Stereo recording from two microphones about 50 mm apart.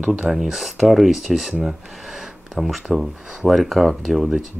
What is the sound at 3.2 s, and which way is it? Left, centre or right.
Speech, centre.